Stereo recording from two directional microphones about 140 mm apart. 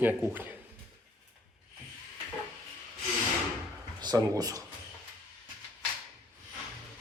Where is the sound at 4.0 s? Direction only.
30° right (ahead or behind).